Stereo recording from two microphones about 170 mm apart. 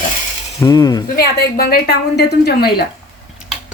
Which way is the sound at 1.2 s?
65° left (ahead or behind).